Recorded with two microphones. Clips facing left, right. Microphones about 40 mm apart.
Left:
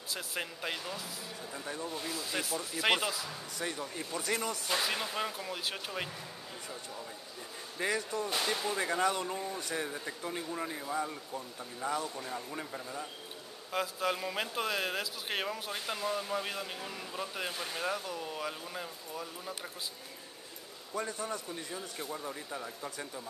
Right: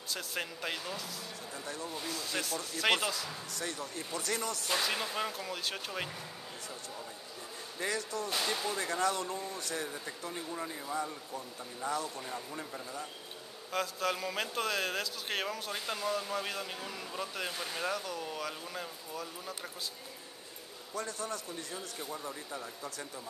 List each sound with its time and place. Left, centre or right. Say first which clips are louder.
0.1 s speech: even; centre
1.5 s a man's voice: left 2 dB; centre
7.8 s a man's voice: left 2 dB; centre
20.9 s a man's voice: left 2 dB; centre